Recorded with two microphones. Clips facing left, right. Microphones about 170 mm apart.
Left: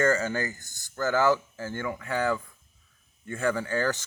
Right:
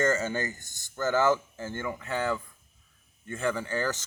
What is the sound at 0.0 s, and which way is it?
Speech, 20° right (ahead or behind).